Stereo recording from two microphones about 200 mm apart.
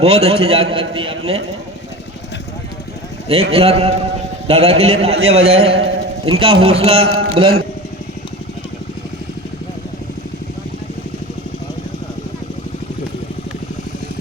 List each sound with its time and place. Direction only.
0.0 s a man's voice: 30° right (ahead or behind)
3.2 s a man's voice: 30° right (ahead or behind)